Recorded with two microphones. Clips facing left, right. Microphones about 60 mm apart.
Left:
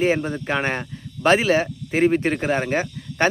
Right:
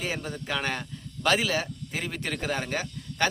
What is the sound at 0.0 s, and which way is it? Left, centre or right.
Speech, left.